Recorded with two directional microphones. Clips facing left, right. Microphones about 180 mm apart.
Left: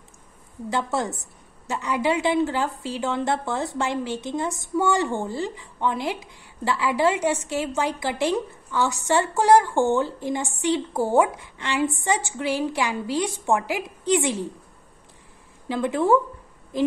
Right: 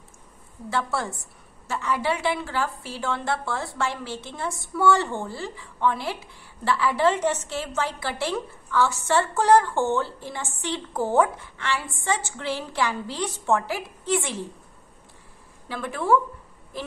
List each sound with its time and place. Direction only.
0.7 s a woman's voice: 20° left (ahead or behind)
15.7 s a woman's voice: 20° left (ahead or behind)